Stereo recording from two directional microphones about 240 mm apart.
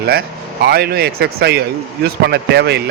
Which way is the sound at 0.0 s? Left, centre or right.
Right.